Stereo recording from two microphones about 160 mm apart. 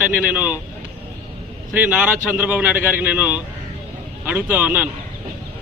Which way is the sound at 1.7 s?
10° right (ahead or behind).